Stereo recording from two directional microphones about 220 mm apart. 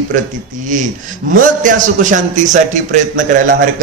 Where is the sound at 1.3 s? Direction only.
35° right (ahead or behind).